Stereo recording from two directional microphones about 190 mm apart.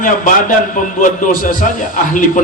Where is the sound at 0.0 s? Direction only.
45° left (ahead or behind).